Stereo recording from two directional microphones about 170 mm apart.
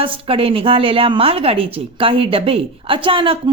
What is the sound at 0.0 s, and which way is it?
A woman's voice, 35° right (ahead or behind).